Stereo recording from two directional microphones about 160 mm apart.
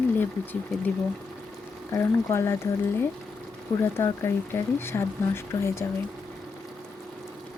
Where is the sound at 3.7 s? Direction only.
25° left (ahead or behind).